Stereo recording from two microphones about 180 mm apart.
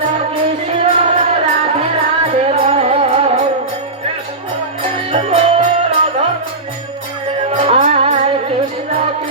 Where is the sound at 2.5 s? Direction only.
35° right (ahead or behind).